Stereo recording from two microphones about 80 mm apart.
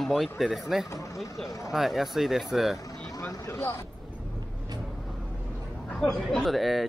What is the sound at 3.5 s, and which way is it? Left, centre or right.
Speech, left.